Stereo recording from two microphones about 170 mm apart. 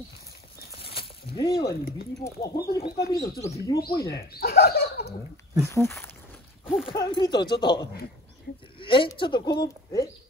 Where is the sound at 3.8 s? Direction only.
65° left (ahead or behind).